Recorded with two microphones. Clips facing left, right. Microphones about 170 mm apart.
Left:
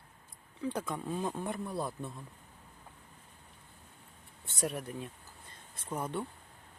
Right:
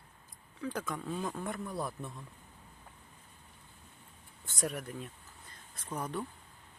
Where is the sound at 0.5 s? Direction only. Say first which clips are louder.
Left 2 dB; 30° left (ahead or behind).